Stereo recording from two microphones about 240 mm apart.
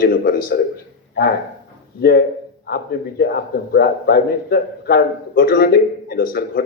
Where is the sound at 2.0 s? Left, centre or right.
Left.